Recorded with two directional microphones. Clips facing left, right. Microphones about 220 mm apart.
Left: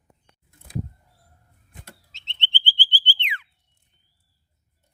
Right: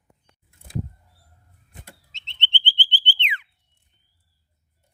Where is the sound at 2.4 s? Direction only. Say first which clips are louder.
Right 1 dB; 20° right (ahead or behind).